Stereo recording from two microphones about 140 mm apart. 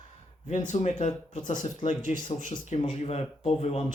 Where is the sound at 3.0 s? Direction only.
50° left (ahead or behind).